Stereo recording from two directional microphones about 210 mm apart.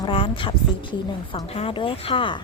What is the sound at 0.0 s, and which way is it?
A woman's voice, 25° left (ahead or behind).